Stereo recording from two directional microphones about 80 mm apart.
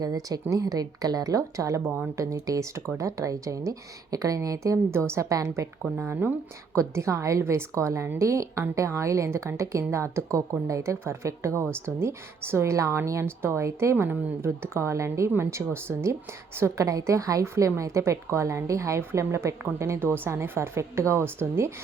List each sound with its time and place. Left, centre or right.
0.0 s a woman's voice: right
6.0 s speech: right
6.7 s a woman's voice: right